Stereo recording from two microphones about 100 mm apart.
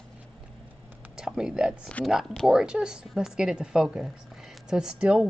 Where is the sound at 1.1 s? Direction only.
5° right (ahead or behind).